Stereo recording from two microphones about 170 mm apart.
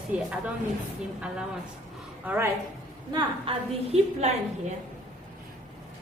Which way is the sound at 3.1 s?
30° right (ahead or behind).